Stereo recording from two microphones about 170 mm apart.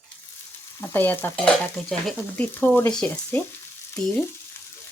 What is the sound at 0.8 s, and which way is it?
Speech, 10° left (ahead or behind).